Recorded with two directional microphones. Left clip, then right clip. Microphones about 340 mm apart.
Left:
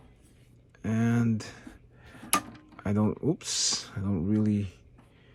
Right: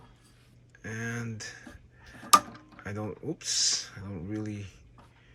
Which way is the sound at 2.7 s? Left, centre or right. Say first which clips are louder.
Left 8 dB; centre.